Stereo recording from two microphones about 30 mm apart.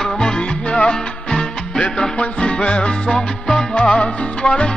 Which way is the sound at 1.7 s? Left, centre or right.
Left.